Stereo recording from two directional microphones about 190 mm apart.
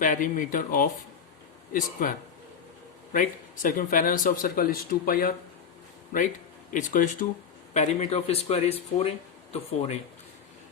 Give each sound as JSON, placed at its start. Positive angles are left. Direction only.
{"t": 0.0, "sound": "speech", "side_deg": 45}
{"t": 6.7, "sound": "speech", "side_deg": 45}